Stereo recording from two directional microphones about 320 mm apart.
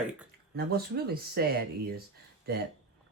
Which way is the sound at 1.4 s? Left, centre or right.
Right.